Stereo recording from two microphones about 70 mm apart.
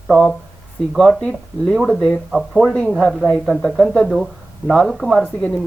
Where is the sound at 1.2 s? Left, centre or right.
Centre.